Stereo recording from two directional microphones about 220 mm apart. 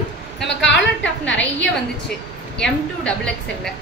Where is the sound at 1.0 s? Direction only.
55° left (ahead or behind).